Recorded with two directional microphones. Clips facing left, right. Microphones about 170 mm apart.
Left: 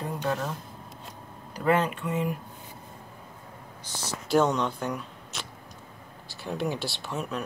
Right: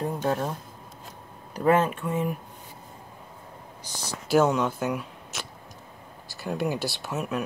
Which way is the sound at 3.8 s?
10° right (ahead or behind).